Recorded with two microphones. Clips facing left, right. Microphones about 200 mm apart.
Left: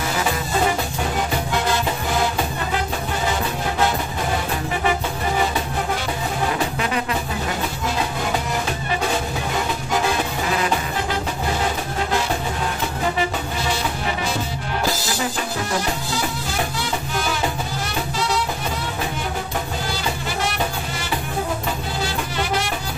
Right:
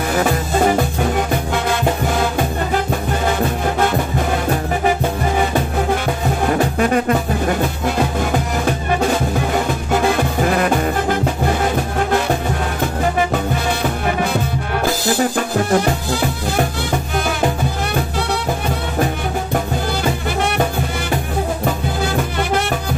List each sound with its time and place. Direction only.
6.5 s music: 50° right (ahead or behind)
10.4 s music: 50° right (ahead or behind)
13.3 s music: 55° right (ahead or behind)